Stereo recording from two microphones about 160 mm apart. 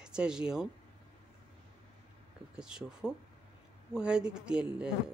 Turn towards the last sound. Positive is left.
turn(degrees=-5)  # may be behind; listen again after turning